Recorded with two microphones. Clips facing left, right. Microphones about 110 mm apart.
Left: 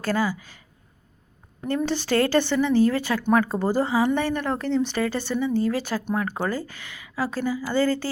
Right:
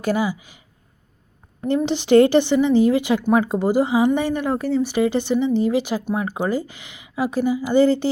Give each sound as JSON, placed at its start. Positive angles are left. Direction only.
{"t": 0.0, "sound": "a woman's voice", "side_deg": -15}
{"t": 1.6, "sound": "a woman's voice", "side_deg": -15}